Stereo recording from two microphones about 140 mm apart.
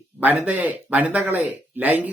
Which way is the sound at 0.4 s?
10° right (ahead or behind).